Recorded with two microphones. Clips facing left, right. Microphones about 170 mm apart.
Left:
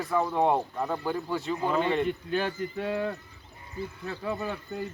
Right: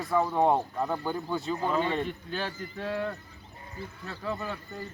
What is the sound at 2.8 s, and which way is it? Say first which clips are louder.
Speech: even; 20° left (ahead or behind).